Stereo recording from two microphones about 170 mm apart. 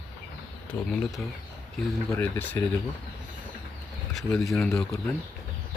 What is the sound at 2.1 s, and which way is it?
Speech, 15° left (ahead or behind).